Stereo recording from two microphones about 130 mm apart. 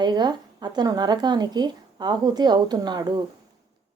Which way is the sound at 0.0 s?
35° right (ahead or behind).